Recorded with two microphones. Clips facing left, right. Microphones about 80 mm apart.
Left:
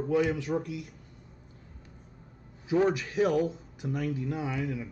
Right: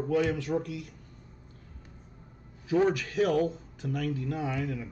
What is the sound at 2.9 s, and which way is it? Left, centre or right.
Speech, right.